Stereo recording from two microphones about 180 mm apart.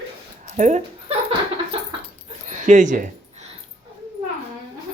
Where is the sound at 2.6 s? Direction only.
45° right (ahead or behind).